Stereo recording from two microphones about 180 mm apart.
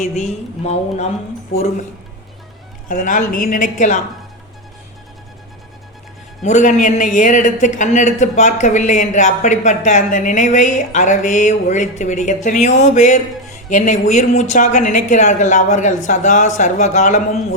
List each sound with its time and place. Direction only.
0.0 s a woman's voice: 40° left (ahead or behind)
2.9 s a man's voice: 45° left (ahead or behind)
6.4 s a man's voice: 40° left (ahead or behind)